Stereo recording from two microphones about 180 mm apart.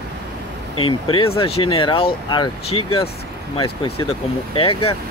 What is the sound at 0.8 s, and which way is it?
Speech, 30° left (ahead or behind).